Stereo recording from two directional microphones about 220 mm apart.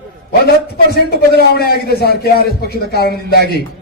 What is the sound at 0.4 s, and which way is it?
A man's voice, 45° left (ahead or behind).